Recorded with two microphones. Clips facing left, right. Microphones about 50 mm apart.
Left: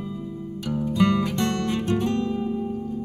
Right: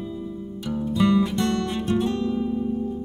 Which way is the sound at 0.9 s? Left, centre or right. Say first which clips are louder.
Right 2 dB; left.